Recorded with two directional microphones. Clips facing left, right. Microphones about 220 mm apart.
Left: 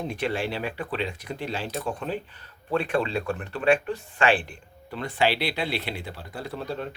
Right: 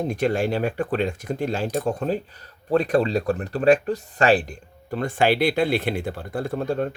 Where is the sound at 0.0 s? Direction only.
45° right (ahead or behind).